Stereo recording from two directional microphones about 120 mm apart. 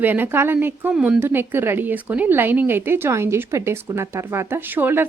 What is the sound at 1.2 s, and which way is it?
A woman's voice, 20° right (ahead or behind).